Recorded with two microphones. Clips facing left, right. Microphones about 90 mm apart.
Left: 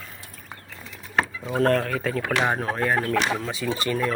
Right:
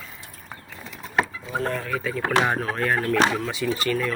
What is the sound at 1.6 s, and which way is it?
Speech, 65° left (ahead or behind).